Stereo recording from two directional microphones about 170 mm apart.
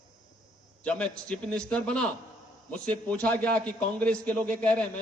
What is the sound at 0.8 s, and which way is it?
A man's voice, 5° left (ahead or behind).